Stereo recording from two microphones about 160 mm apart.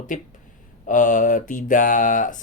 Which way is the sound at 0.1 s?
55° left (ahead or behind).